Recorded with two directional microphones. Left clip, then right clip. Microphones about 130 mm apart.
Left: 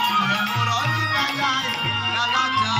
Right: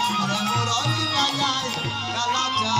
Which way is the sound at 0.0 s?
35° right (ahead or behind).